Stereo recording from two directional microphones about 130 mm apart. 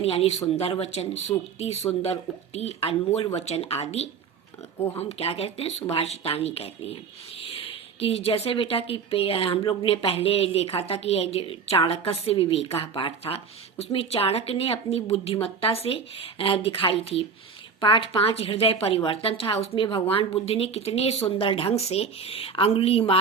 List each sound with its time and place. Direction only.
0.0 s speech: 50° left (ahead or behind)
7.9 s speech: 45° left (ahead or behind)